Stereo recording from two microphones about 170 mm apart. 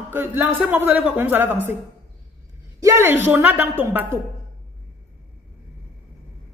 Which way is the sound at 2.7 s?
15° right (ahead or behind).